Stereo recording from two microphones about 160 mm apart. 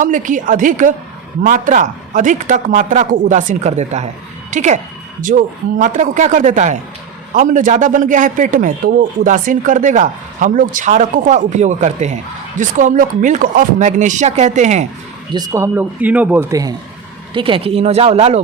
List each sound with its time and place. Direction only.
0.0 s a man's voice: 55° right (ahead or behind)
15.3 s a man's voice: 25° right (ahead or behind)
17.3 s speech: 35° right (ahead or behind)